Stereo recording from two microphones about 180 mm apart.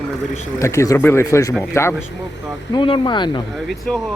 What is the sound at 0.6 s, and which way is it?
Speech, 15° left (ahead or behind).